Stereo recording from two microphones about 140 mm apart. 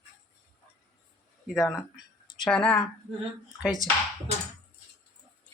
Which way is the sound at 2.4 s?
5° left (ahead or behind).